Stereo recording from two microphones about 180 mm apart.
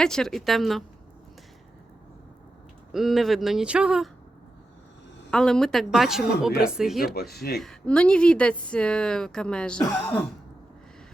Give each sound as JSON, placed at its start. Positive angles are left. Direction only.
{"t": 0.0, "sound": "speech", "side_deg": 5}
{"t": 2.9, "sound": "speech", "side_deg": 0}
{"t": 5.3, "sound": "speech", "side_deg": 5}
{"t": 7.1, "sound": "speech", "side_deg": 60}
{"t": 7.6, "sound": "speech", "side_deg": 5}